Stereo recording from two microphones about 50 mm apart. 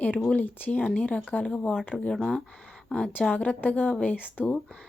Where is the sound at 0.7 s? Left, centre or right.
Left.